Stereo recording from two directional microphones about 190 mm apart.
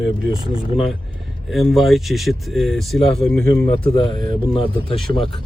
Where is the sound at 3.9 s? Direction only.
25° left (ahead or behind).